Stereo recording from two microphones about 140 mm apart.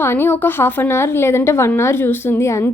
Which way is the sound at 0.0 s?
15° left (ahead or behind).